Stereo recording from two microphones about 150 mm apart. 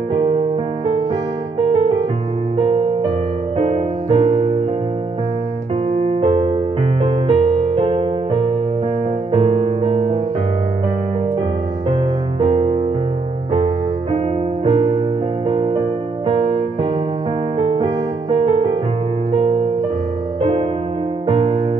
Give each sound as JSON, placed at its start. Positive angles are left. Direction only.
{"t": 0.1, "sound": "electric piano", "side_deg": -35}
{"t": 1.6, "sound": "music", "side_deg": -35}
{"t": 5.9, "sound": "music", "side_deg": -45}
{"t": 11.9, "sound": "piano", "side_deg": -40}
{"t": 14.1, "sound": "music", "side_deg": -40}
{"t": 21.3, "sound": "music", "side_deg": -40}